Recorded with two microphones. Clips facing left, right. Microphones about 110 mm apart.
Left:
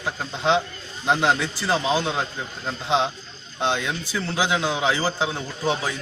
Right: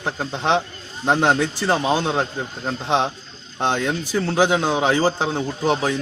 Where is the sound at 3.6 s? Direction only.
50° right (ahead or behind).